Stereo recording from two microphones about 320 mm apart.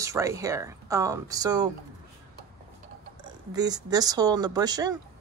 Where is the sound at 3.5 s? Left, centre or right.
Centre.